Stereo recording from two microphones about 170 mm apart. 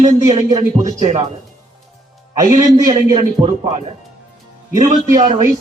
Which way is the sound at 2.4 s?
20° right (ahead or behind).